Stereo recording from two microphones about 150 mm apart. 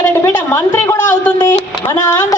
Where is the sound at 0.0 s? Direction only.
15° left (ahead or behind).